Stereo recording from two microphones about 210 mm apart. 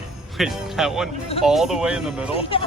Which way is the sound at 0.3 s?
Centre (ahead or behind).